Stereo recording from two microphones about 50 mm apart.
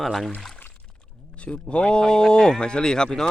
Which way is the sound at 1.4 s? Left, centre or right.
Left.